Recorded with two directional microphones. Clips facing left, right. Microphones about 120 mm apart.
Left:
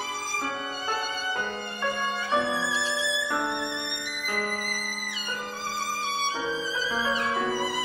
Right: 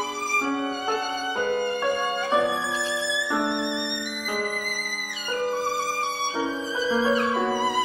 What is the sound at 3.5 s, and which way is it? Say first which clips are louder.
Music: right 4 dB; 55° right (ahead or behind).